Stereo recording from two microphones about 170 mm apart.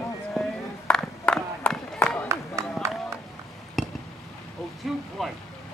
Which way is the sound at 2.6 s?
15° right (ahead or behind).